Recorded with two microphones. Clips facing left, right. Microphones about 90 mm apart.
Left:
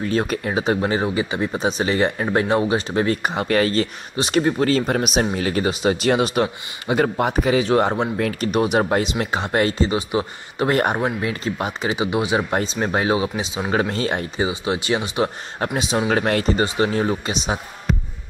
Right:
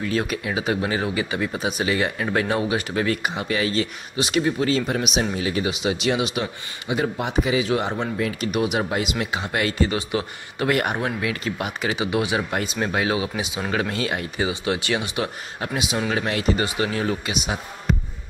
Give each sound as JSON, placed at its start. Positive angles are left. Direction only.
{"t": 0.0, "sound": "speech", "side_deg": 35}
{"t": 8.2, "sound": "speech", "side_deg": 55}
{"t": 8.5, "sound": "speech", "side_deg": 40}
{"t": 12.4, "sound": "speech", "side_deg": 35}
{"t": 14.5, "sound": "speech", "side_deg": 20}
{"t": 16.1, "sound": "speech", "side_deg": 45}
{"t": 16.5, "sound": "speech", "side_deg": 30}